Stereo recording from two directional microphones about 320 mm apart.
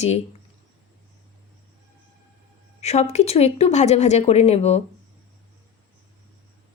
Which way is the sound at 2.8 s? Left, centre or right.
Centre.